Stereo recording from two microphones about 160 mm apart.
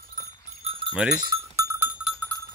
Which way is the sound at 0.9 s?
5° right (ahead or behind).